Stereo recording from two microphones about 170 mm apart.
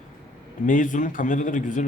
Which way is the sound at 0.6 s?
50° left (ahead or behind).